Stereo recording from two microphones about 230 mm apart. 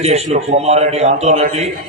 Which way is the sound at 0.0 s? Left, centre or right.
Right.